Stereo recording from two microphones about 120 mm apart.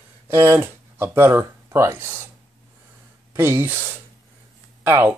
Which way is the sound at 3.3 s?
20° right (ahead or behind).